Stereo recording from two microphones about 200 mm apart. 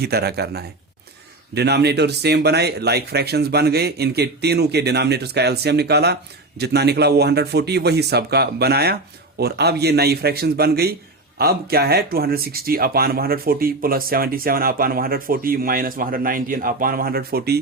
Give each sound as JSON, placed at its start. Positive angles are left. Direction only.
{"t": 0.0, "sound": "speech", "side_deg": -55}